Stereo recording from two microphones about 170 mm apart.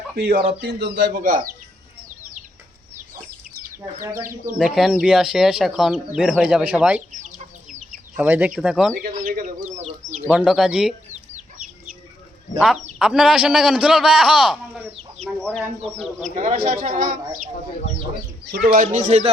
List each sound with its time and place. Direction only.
0.2 s speech: 65° right (ahead or behind)
4.5 s speech: centre (ahead or behind)
7.1 s chicken: 45° right (ahead or behind)
8.1 s speech: 10° right (ahead or behind)
9.0 s speech: 55° right (ahead or behind)
10.3 s speech: centre (ahead or behind)
11.1 s chicken: 45° right (ahead or behind)
12.5 s speech: centre (ahead or behind)
16.0 s speech: 45° right (ahead or behind)
18.8 s speech: 45° right (ahead or behind)